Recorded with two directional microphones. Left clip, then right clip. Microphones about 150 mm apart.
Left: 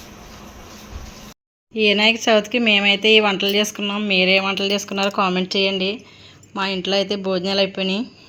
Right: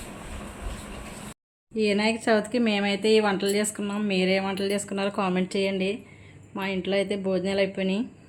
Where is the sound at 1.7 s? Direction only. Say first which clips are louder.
Left 9 dB; 15° left (ahead or behind).